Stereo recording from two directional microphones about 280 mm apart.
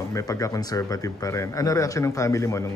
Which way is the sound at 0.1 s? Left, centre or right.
Centre.